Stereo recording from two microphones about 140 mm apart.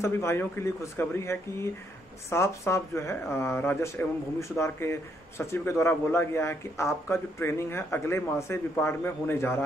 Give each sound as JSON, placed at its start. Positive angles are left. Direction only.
{"t": 0.0, "sound": "a man's voice", "side_deg": 20}